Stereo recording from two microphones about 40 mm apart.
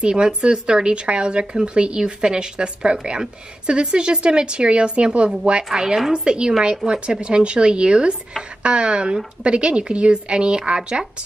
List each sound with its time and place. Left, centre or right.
0.0 s speech: right